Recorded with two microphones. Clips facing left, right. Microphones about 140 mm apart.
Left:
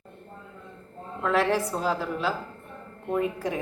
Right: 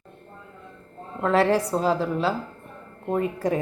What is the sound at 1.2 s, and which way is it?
A woman's voice, 35° right (ahead or behind).